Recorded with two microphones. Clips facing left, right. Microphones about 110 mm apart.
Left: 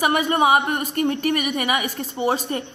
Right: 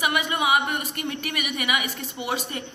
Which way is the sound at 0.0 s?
40° left (ahead or behind).